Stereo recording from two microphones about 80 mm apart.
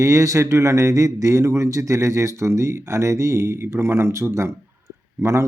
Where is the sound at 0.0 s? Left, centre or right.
Right.